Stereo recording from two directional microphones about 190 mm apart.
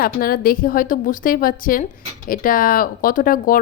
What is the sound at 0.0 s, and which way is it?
Speech, 50° left (ahead or behind).